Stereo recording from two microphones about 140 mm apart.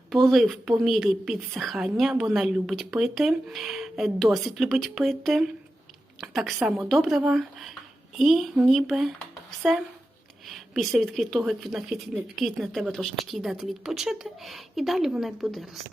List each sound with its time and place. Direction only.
0.1 s a woman's voice: centre (ahead or behind)
10.5 s a woman's voice: centre (ahead or behind)